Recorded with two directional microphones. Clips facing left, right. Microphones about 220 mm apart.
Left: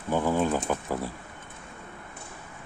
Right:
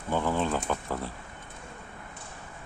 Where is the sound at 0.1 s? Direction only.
10° left (ahead or behind).